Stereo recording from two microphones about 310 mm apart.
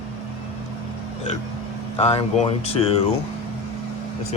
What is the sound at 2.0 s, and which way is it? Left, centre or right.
Speech, centre.